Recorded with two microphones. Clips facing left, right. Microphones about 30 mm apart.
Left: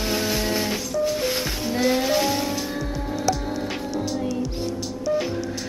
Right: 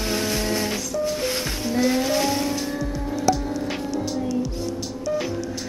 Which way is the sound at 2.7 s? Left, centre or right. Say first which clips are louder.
Right 1 dB; left.